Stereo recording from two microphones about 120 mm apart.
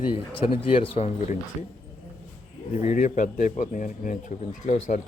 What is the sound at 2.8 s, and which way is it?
Speech, 90° left.